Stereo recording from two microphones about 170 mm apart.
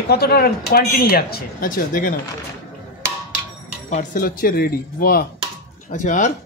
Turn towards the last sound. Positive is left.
turn(degrees=45)  # may be behind; listen again after turning